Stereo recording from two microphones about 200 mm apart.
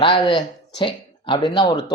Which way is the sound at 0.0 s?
20° left (ahead or behind).